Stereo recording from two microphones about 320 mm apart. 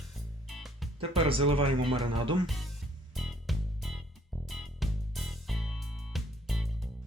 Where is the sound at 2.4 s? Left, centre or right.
Centre.